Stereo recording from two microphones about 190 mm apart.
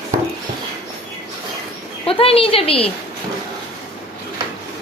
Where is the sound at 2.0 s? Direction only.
30° left (ahead or behind).